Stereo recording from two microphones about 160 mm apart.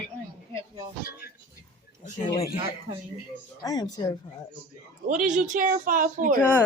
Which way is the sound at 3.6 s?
25° left (ahead or behind).